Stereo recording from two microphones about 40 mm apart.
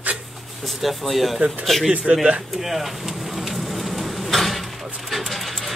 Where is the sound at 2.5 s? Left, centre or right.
Centre.